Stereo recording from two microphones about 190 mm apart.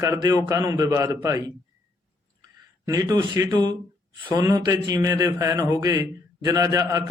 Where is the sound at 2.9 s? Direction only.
20° right (ahead or behind).